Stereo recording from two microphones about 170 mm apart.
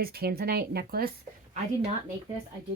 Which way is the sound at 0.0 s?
65° right (ahead or behind).